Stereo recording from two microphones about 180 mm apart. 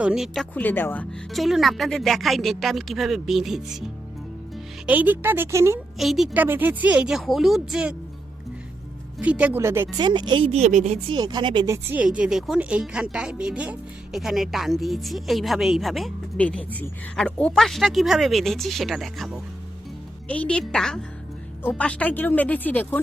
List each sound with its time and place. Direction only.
0.0 s speech: 5° right (ahead or behind)
0.5 s speech: 10° left (ahead or behind)
1.3 s speech: centre (ahead or behind)
6.0 s speech: centre (ahead or behind)
9.1 s speech: 5° right (ahead or behind)
10.0 s a woman's voice: 25° right (ahead or behind); by 11.0 s 40° right (ahead or behind)
11.1 s speech: 25° right (ahead or behind); by 23.0 s 10° left (ahead or behind)